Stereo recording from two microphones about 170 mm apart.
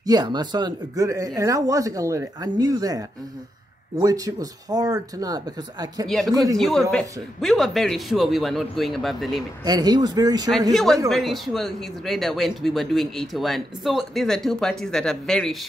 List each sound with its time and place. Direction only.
0.0 s speech: 25° right (ahead or behind)
6.0 s speech: centre (ahead or behind)
9.7 s speech: 25° right (ahead or behind)
10.7 s speech: centre (ahead or behind)